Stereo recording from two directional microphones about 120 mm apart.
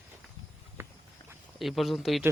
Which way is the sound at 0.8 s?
20° right (ahead or behind).